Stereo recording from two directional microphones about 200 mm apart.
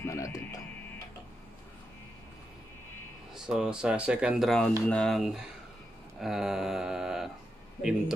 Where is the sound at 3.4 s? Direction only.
5° right (ahead or behind).